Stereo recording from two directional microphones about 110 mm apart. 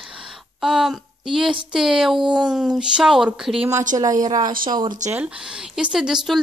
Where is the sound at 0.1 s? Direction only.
5° right (ahead or behind).